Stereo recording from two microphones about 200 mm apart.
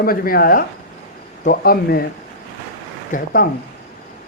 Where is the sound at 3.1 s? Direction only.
40° left (ahead or behind).